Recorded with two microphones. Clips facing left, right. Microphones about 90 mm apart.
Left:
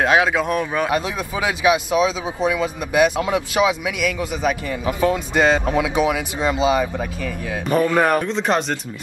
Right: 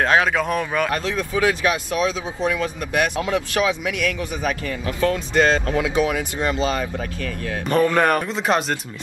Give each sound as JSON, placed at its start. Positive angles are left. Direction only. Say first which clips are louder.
{"t": 0.0, "sound": "speech", "louder": "left 1 dB", "side_deg": 15}